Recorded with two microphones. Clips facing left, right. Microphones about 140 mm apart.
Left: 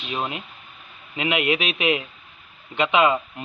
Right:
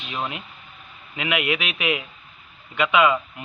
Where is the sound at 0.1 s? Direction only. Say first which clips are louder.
Left 2 dB; 25° left (ahead or behind).